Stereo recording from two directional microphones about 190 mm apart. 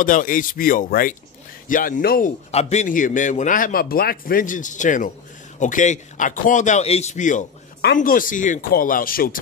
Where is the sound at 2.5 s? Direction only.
35° left (ahead or behind).